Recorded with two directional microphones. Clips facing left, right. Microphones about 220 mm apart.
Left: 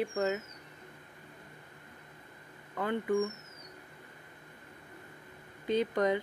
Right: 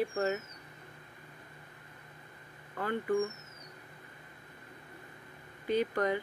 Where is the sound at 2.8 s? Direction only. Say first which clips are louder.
Left 1 dB; 20° left (ahead or behind).